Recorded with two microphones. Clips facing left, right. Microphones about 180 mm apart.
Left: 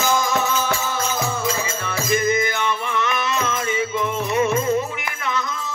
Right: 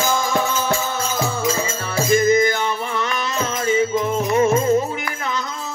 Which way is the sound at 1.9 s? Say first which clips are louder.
Right 5 dB; 35° right (ahead or behind).